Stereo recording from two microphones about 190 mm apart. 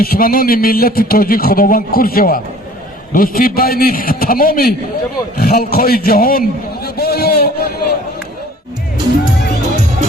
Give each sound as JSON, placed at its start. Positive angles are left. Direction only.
{"t": 0.0, "sound": "a man's voice", "side_deg": 50}